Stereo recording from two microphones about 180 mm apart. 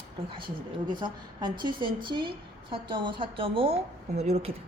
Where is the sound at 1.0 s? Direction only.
25° right (ahead or behind).